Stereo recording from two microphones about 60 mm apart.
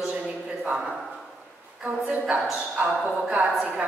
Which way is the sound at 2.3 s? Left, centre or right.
Right.